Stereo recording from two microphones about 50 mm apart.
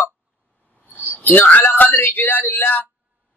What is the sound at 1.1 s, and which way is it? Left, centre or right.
Speech, left.